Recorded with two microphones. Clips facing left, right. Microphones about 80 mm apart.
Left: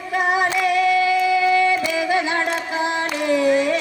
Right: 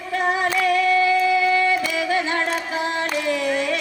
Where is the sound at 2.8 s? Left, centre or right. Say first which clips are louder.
Left 4 dB; centre.